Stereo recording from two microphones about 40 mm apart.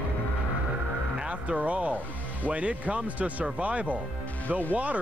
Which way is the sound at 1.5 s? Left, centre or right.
Right.